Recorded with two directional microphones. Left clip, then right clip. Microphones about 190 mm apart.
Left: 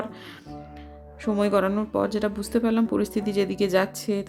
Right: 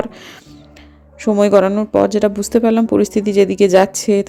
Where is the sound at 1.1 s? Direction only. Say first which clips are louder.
Right 11 dB; 25° right (ahead or behind).